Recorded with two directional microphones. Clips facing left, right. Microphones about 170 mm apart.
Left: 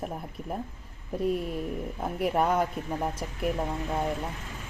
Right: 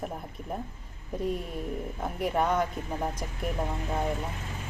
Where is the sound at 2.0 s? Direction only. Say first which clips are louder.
Left 2 dB; 5° left (ahead or behind).